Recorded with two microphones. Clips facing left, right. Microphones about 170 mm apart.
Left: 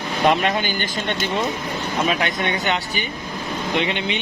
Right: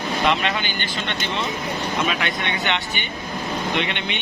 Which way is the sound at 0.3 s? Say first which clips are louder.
Left 5 dB; 45° left (ahead or behind).